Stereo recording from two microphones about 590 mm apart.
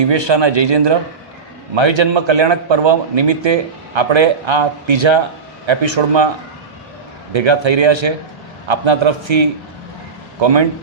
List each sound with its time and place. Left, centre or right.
0.0 s a man's voice: right
7.3 s a man's voice: right